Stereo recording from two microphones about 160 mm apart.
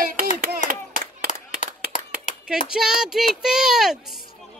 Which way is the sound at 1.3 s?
50° left (ahead or behind).